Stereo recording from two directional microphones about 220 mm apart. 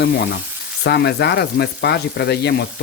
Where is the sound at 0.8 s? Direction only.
50° left (ahead or behind).